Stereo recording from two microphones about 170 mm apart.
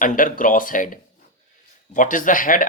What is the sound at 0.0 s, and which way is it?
Speech, 50° left (ahead or behind).